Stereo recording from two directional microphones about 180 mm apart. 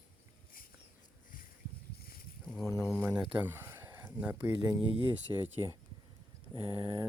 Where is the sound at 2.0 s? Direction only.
55° left (ahead or behind).